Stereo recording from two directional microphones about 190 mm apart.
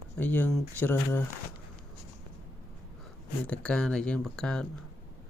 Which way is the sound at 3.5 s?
5° left (ahead or behind).